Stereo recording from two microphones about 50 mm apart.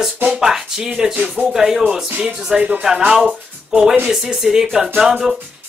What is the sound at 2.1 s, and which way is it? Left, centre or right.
Speech, right.